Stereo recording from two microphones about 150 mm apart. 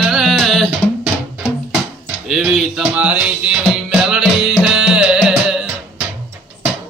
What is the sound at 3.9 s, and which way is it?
Music, 5° right (ahead or behind).